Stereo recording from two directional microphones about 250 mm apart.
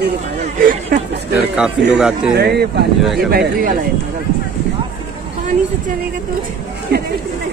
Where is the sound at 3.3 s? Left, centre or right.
Right.